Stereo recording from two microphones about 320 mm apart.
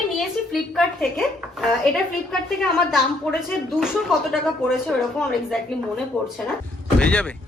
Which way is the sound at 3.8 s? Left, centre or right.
Centre.